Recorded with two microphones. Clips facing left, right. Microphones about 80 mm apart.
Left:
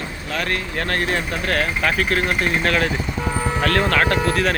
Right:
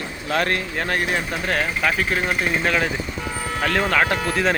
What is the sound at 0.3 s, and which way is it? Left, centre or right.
Speech, right.